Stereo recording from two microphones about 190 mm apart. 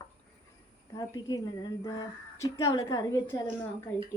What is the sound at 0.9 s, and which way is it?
A woman's voice, 20° left (ahead or behind).